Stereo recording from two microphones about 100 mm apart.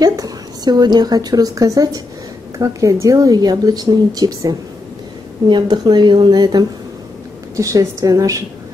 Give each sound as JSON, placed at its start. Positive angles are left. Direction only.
{"t": 0.0, "sound": "a woman's voice", "side_deg": -40}
{"t": 5.5, "sound": "speech", "side_deg": -50}
{"t": 7.5, "sound": "speech", "side_deg": -35}